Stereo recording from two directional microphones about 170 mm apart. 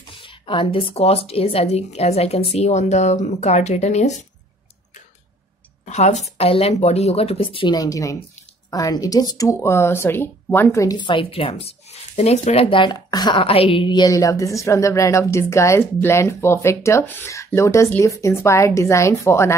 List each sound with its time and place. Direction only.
0.1 s speech: 30° left (ahead or behind)
5.9 s speech: 40° left (ahead or behind); by 19.5 s 15° left (ahead or behind)